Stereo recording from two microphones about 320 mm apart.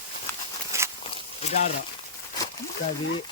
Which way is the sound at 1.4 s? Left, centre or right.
Centre.